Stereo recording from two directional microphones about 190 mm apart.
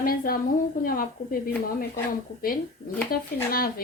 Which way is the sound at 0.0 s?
50° left (ahead or behind).